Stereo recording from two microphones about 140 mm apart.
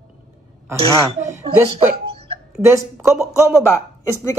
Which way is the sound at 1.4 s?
40° right (ahead or behind).